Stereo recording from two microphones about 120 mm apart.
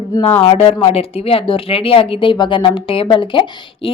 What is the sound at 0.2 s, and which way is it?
Speech, 55° left (ahead or behind).